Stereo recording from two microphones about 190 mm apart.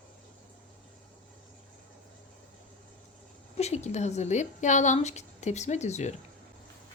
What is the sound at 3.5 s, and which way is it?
Speech, 35° left (ahead or behind).